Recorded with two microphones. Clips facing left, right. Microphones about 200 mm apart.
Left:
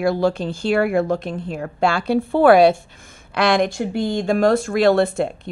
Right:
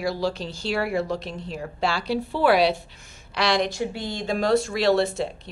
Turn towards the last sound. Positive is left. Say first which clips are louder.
# left 5 dB
turn(degrees=55)  # may be behind; listen again after turning